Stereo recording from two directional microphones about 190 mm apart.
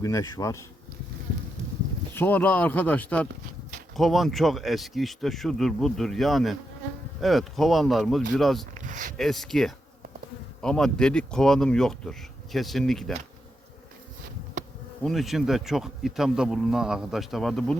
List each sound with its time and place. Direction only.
0.0 s speech: 15° left (ahead or behind)
2.1 s speech: 10° left (ahead or behind)
8.7 s a sound: 40° right (ahead or behind)
9.1 s speech: centre (ahead or behind)
15.0 s speech: centre (ahead or behind)